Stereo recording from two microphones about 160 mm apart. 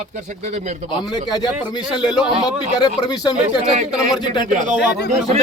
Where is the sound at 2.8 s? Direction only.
25° left (ahead or behind).